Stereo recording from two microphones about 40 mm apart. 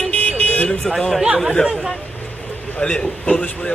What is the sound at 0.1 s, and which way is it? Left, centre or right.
Car alarm, left.